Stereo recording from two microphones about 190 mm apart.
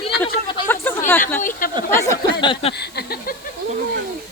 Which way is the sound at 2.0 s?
20° left (ahead or behind).